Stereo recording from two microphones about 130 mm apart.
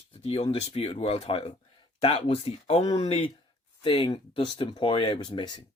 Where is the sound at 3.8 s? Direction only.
40° left (ahead or behind).